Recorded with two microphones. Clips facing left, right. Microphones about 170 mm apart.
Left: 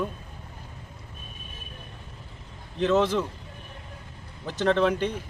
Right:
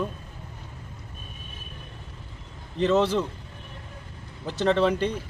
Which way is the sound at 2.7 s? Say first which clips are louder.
Right 1 dB; 5° left (ahead or behind).